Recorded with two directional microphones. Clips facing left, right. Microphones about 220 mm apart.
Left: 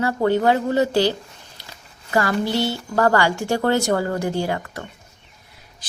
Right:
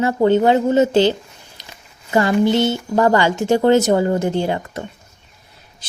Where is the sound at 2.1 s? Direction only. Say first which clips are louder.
Right 6 dB; 20° right (ahead or behind).